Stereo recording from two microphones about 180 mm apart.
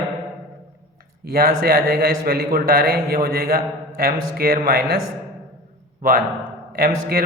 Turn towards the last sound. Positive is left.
turn(degrees=-60)  # may be behind; listen again after turning